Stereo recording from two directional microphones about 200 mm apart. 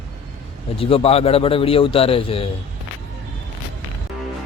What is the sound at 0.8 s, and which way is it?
A man's voice, 30° left (ahead or behind).